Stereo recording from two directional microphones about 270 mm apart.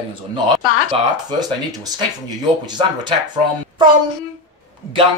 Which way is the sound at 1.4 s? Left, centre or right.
Centre.